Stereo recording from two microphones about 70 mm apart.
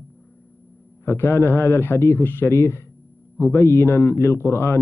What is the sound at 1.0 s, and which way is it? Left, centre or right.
A man's voice, left.